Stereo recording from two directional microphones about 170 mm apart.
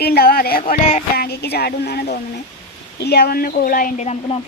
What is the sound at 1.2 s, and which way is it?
Speech, 70° left (ahead or behind).